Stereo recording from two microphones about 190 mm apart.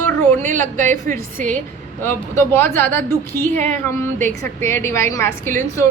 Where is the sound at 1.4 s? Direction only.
10° left (ahead or behind).